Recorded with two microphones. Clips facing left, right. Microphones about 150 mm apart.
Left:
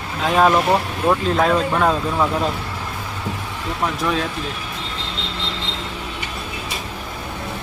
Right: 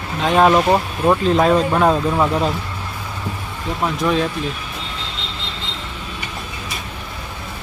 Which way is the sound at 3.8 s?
5° right (ahead or behind).